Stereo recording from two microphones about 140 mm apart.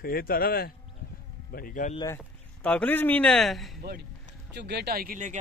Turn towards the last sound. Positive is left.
turn(degrees=-75)  # may be behind; listen again after turning